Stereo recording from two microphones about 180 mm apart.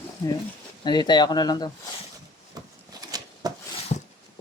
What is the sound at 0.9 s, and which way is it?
Speech, 25° left (ahead or behind).